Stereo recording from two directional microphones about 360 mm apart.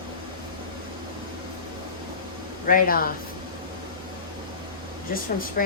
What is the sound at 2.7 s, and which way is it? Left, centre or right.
Speech, left.